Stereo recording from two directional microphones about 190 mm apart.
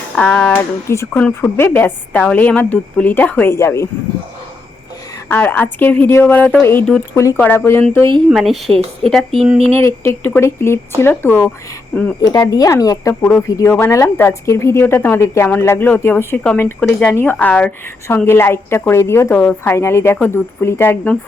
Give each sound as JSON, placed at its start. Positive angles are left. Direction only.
{"t": 0.2, "sound": "speech", "side_deg": 5}
{"t": 5.3, "sound": "speech", "side_deg": 10}
{"t": 8.3, "sound": "speech", "side_deg": 0}
{"t": 9.6, "sound": "speech", "side_deg": -30}
{"t": 9.8, "sound": "speech", "side_deg": 15}